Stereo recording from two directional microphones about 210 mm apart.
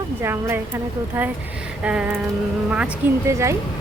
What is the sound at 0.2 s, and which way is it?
Speech, 10° right (ahead or behind).